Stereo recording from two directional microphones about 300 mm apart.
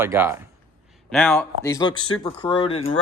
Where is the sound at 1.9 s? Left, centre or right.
Left.